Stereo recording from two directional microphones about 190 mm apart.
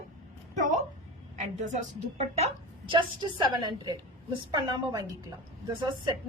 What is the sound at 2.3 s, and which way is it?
A woman's voice, 30° right (ahead or behind).